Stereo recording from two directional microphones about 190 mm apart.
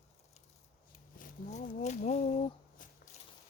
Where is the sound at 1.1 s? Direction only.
45° left (ahead or behind).